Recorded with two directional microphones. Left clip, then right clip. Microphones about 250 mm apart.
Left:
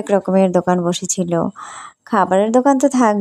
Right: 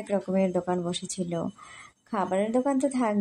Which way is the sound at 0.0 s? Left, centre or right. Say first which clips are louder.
Left 12 dB; left.